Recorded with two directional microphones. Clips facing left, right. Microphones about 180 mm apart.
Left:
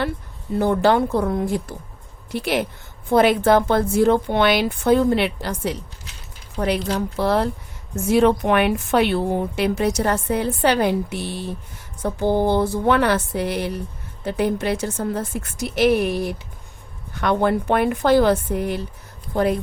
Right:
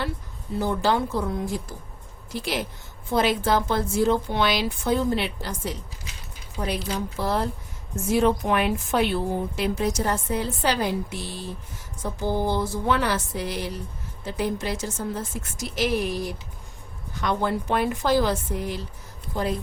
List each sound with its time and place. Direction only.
0.6 s a woman's voice: 60° left (ahead or behind)